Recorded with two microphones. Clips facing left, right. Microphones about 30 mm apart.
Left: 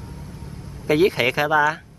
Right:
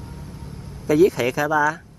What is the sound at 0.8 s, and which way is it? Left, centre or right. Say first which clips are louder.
Speech: right 1 dB; left.